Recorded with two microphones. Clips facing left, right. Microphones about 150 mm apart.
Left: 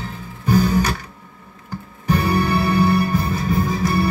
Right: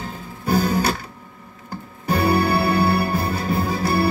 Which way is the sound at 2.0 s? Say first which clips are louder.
Right 1 dB; 35° right (ahead or behind).